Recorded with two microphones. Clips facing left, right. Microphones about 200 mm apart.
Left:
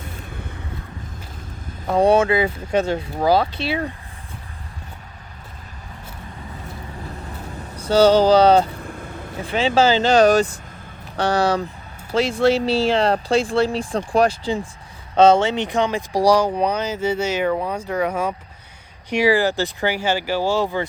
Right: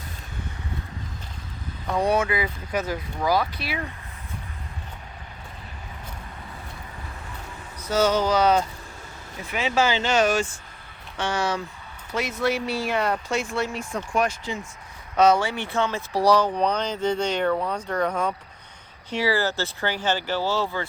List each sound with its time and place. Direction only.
2.0 s speech: 30° left (ahead or behind)
7.8 s speech: 30° left (ahead or behind)
8.8 s vehicle: 55° left (ahead or behind)
9.5 s speech: 30° left (ahead or behind); by 20.8 s 15° left (ahead or behind)